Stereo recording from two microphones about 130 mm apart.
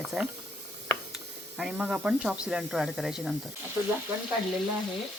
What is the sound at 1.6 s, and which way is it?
Speech, 5° right (ahead or behind).